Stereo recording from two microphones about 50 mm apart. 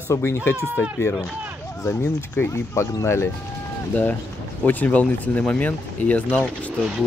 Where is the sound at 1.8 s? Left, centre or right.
Left.